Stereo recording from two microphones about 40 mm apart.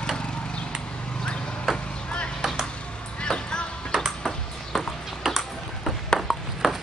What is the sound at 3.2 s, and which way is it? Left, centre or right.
Music, centre.